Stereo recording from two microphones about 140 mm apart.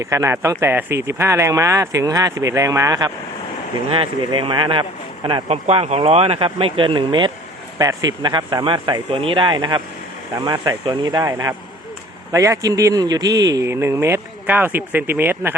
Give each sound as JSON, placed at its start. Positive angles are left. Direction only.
{"t": 0.0, "sound": "a man's voice", "side_deg": -20}
{"t": 3.8, "sound": "speech", "side_deg": -40}
{"t": 5.5, "sound": "a man's voice", "side_deg": -50}